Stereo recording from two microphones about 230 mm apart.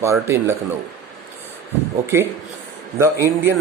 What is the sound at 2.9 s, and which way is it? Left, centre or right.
Speech, centre.